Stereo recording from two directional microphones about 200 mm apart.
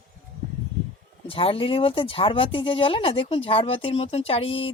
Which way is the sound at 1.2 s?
25° left (ahead or behind).